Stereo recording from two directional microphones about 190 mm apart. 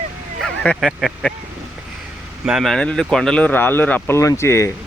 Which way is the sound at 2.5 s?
Centre (ahead or behind).